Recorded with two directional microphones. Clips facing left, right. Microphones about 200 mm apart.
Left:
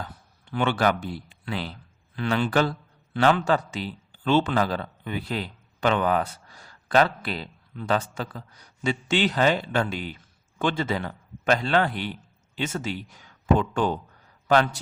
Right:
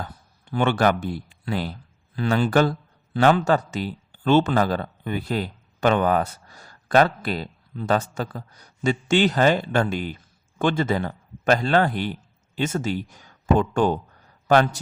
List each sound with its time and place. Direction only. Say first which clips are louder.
0.5 s a man's voice: right 3 dB; 45° right (ahead or behind)